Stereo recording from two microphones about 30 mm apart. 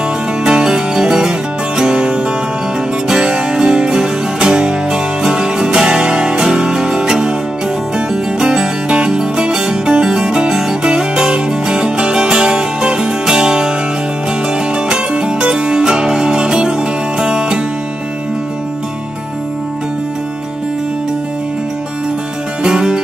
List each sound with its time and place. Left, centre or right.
0.5 s music: centre
3.9 s music: centre
8.9 s music: right
14.9 s music: right
15.8 s music: centre
22.7 s music: right